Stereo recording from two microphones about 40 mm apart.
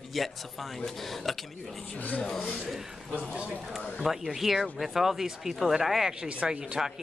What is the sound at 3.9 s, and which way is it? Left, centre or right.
A man's voice, centre.